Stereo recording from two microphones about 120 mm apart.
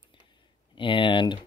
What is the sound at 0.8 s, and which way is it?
Speech, 45° left (ahead or behind).